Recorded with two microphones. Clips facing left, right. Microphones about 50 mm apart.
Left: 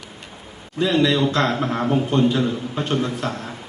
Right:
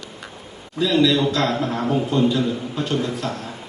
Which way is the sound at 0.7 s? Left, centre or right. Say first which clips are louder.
Right 1 dB; left.